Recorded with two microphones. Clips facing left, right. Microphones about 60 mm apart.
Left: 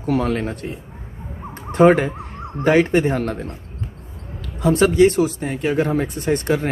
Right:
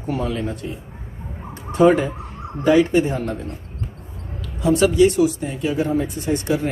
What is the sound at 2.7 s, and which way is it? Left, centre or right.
Speech, left.